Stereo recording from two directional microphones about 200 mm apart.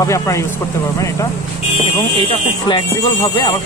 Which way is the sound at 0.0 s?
15° left (ahead or behind).